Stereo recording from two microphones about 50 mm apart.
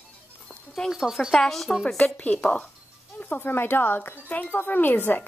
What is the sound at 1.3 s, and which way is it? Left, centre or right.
Speech, centre.